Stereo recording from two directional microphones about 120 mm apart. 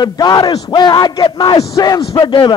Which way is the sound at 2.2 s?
45° left (ahead or behind).